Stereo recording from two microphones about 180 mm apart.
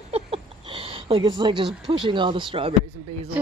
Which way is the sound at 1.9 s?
25° right (ahead or behind).